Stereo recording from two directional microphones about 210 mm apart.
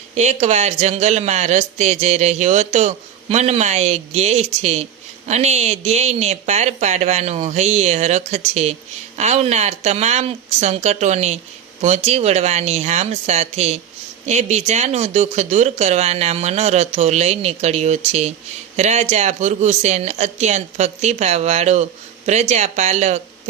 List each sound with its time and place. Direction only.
0.2 s speech: 35° right (ahead or behind)